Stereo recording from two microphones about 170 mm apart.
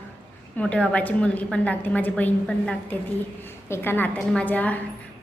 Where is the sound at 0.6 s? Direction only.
5° left (ahead or behind).